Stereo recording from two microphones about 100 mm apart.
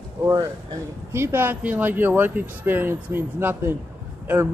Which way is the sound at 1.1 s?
25° right (ahead or behind).